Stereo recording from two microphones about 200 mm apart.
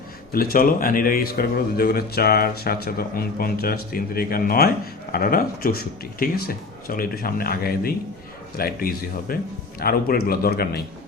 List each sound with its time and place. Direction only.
0.3 s a man's voice: 45° left (ahead or behind)